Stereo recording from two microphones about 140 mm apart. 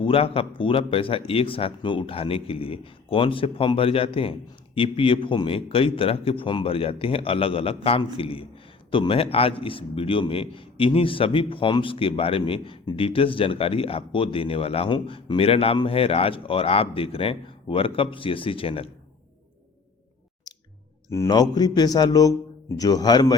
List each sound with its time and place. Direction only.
0.0 s a man's voice: 40° left (ahead or behind)
21.1 s speech: 25° left (ahead or behind)